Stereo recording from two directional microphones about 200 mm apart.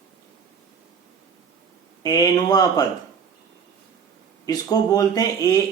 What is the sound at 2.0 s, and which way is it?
Speech, 20° left (ahead or behind).